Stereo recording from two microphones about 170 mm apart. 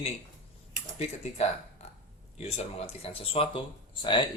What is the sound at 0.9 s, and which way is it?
Speech, 40° left (ahead or behind).